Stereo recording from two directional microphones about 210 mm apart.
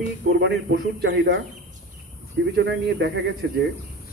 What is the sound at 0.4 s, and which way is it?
Speech, 55° right (ahead or behind).